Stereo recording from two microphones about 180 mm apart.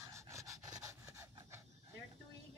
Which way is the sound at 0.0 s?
15° right (ahead or behind).